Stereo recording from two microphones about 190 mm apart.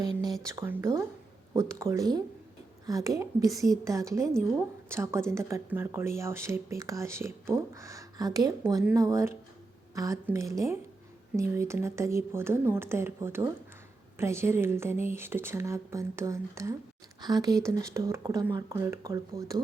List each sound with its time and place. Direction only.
0.2 s speech: 20° right (ahead or behind)